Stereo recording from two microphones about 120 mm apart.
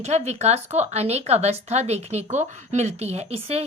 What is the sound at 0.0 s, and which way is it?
Speech, 65° right (ahead or behind).